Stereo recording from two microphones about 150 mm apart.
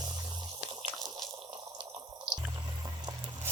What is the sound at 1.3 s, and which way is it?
Water, 30° right (ahead or behind).